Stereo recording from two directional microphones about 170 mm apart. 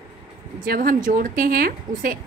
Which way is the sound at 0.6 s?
55° right (ahead or behind).